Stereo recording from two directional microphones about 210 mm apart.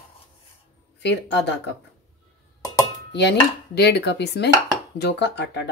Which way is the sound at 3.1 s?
55° left (ahead or behind).